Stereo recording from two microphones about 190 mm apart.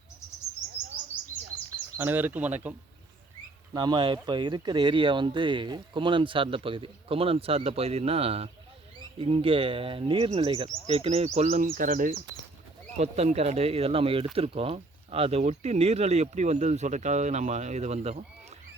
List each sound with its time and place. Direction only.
2.0 s speech: 10° right (ahead or behind)
3.8 s speech: 25° right (ahead or behind)
11.6 s speech: 45° right (ahead or behind)